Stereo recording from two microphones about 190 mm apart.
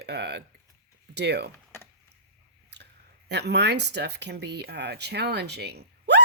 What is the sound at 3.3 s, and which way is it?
Speech, 60° right (ahead or behind).